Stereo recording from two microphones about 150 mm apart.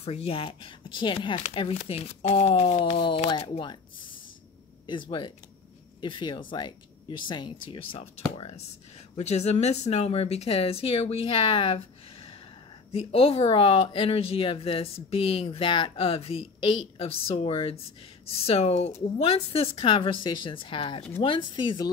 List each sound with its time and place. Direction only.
0.0 s speech: 40° left (ahead or behind)
4.8 s speech: 30° left (ahead or behind)